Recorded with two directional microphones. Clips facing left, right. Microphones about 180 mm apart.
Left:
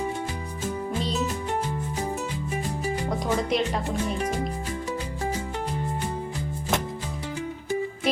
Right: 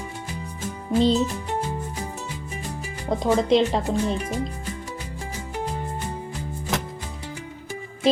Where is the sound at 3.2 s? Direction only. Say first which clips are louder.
Right 8 dB; 25° right (ahead or behind).